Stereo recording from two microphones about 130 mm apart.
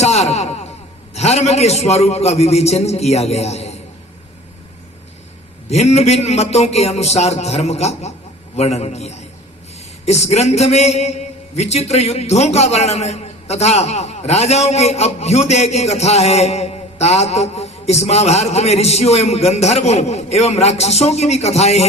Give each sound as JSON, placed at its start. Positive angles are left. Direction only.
{"t": 0.0, "sound": "a sound", "side_deg": 55}
{"t": 1.1, "sound": "a man's voice", "side_deg": 55}
{"t": 5.6, "sound": "a man's voice", "side_deg": 55}